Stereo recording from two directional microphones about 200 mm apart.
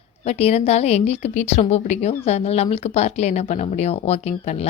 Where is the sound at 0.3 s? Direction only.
30° left (ahead or behind).